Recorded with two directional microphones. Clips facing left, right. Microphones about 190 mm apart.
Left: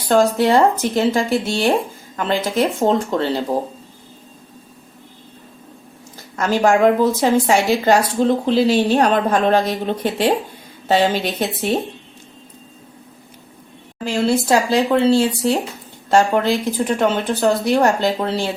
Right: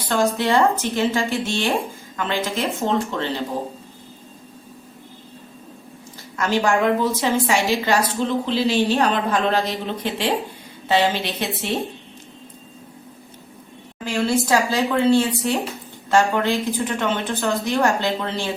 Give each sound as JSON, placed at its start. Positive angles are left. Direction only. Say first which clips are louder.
{"t": 0.1, "sound": "a woman's voice", "louder": "left 5 dB", "side_deg": 40}
{"t": 6.3, "sound": "a woman's voice", "louder": "left 4 dB", "side_deg": 45}
{"t": 14.1, "sound": "a woman's voice", "louder": "left 3 dB", "side_deg": 30}